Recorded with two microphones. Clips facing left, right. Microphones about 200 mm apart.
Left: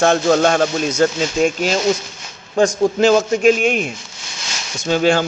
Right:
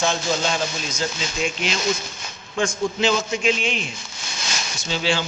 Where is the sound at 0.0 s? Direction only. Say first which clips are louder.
Left 9 dB; 60° left (ahead or behind); by 1.8 s 45° left (ahead or behind).